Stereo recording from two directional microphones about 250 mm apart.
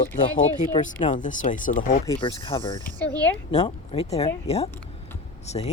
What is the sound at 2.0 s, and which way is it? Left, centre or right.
Speech, centre.